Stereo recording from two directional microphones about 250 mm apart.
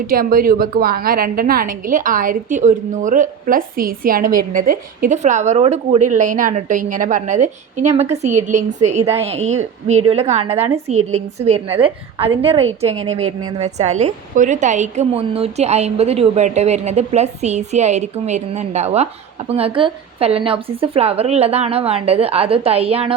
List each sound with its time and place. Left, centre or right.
0.1 s a woman's voice: right